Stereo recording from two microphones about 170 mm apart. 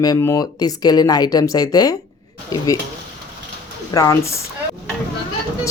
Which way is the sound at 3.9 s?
15° left (ahead or behind).